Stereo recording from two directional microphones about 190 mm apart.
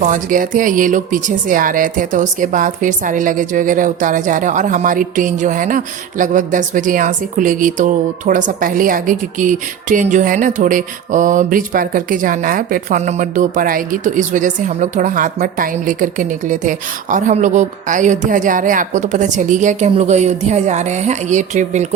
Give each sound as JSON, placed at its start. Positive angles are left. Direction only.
{"t": 0.0, "sound": "a woman's voice", "side_deg": -45}